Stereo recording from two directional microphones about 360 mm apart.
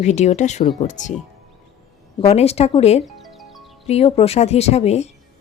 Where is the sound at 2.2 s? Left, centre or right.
Centre.